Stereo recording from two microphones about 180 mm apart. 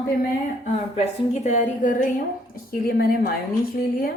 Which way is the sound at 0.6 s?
35° left (ahead or behind).